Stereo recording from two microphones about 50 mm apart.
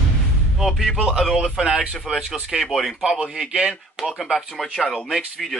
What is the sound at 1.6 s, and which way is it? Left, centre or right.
Speech, centre.